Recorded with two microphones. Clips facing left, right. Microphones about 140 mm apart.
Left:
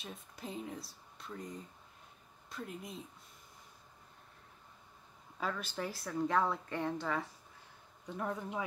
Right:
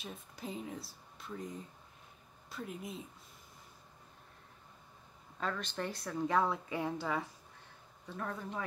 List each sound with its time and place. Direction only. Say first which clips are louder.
0.0 s a woman's voice: right 1 dB; centre (ahead or behind)
5.4 s a woman's voice: even; 5° left (ahead or behind)
8.1 s speech: left 2 dB; 15° left (ahead or behind)